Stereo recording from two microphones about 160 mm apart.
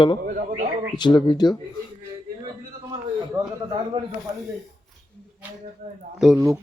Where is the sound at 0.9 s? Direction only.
25° left (ahead or behind).